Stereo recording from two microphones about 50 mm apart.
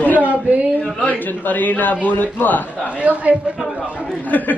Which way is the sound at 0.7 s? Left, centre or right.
Left.